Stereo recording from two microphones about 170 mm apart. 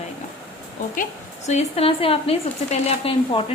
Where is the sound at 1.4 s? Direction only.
40° left (ahead or behind).